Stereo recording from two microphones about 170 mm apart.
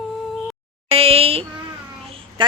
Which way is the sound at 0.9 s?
35° right (ahead or behind).